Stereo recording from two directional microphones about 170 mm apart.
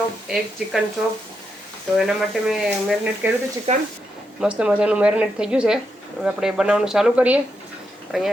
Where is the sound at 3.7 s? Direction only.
40° right (ahead or behind).